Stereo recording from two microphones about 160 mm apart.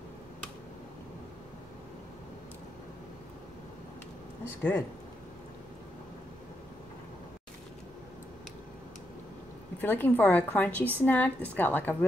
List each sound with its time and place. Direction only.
4.6 s a woman's voice: 10° left (ahead or behind)
9.8 s a woman's voice: 10° left (ahead or behind)